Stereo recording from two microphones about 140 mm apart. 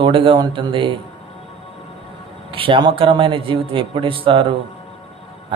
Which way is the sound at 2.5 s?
40° right (ahead or behind).